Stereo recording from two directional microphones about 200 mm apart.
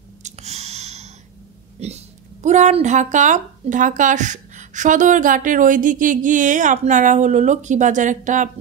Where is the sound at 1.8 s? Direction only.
30° right (ahead or behind).